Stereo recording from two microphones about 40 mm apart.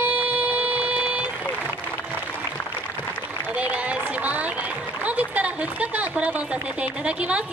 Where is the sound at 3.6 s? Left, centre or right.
Right.